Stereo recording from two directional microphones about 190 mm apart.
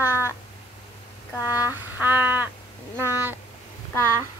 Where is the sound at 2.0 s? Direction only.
10° right (ahead or behind).